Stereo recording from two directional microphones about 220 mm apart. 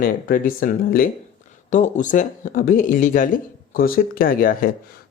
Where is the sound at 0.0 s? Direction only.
40° left (ahead or behind).